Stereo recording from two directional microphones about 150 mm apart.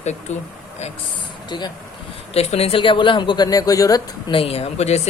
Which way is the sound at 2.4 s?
45° left (ahead or behind).